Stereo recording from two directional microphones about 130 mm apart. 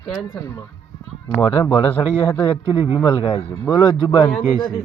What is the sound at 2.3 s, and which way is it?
Speech, 30° left (ahead or behind).